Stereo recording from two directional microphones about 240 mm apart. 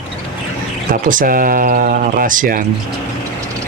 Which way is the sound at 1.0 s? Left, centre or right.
Right.